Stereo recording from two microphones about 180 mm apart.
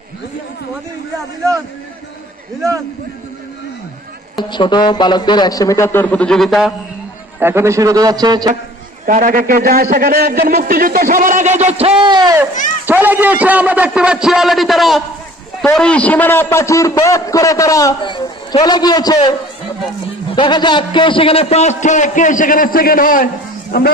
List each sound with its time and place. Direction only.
4.4 s a man's voice: 25° left (ahead or behind); by 6.7 s centre (ahead or behind)
7.3 s a man's voice: 15° right (ahead or behind)
9.0 s a man's voice: 50° right (ahead or behind); by 12.4 s 25° right (ahead or behind)
12.8 s a man's voice: 10° right (ahead or behind); by 19.3 s 20° left (ahead or behind)
20.3 s a man's voice: 25° left (ahead or behind); by 23.9 s 60° left (ahead or behind)